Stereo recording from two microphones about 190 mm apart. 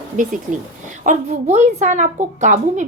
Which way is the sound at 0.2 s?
40° right (ahead or behind).